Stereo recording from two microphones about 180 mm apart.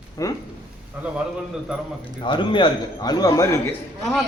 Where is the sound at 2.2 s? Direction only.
25° left (ahead or behind).